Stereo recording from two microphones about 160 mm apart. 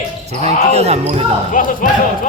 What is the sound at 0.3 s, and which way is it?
Speech, 45° right (ahead or behind).